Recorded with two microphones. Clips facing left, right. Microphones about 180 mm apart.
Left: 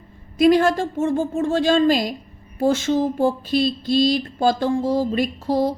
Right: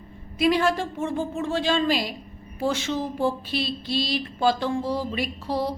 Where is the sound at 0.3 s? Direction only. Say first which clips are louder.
Left 6 dB; 45° left (ahead or behind).